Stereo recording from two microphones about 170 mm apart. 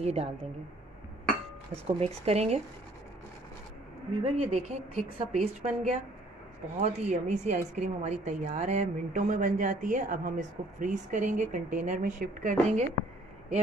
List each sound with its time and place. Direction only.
0.0 s a woman's voice: 35° right (ahead or behind)
1.9 s a woman's voice: 35° right (ahead or behind)
4.2 s a woman's voice: 40° right (ahead or behind)